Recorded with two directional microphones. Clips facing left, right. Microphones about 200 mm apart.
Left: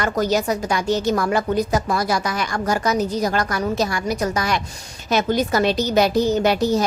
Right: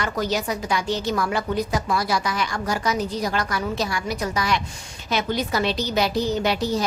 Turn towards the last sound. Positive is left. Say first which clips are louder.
# left 5 dB
turn(degrees=50)  # may be behind; listen again after turning